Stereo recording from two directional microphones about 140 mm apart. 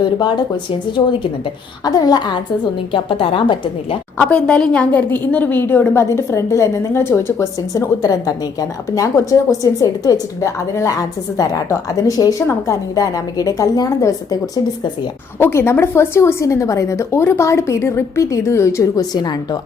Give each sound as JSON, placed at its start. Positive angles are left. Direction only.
{"t": 0.0, "sound": "a woman's voice", "side_deg": 30}
{"t": 4.2, "sound": "a woman's voice", "side_deg": 10}